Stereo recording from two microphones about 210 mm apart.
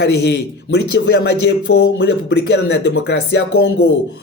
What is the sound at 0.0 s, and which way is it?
Speech, 50° left (ahead or behind).